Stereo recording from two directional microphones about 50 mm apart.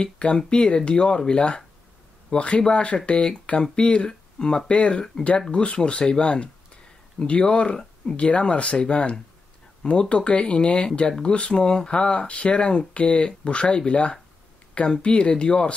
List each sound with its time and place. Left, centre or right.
0.0 s speech: centre